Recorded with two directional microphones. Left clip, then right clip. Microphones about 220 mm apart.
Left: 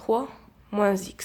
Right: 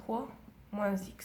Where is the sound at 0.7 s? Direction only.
40° left (ahead or behind).